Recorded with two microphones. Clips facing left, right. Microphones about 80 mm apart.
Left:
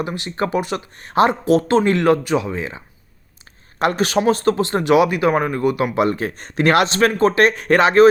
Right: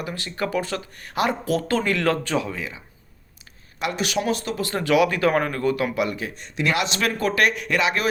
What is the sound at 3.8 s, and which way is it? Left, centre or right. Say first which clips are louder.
Speech: left 7 dB; left.